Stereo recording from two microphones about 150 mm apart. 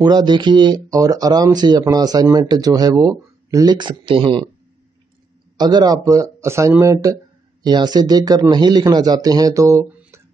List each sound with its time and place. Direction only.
0.0 s speech: 30° right (ahead or behind)
5.6 s speech: 30° right (ahead or behind)